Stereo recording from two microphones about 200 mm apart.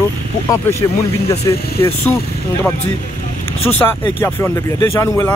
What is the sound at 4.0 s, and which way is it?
Speech, 15° left (ahead or behind).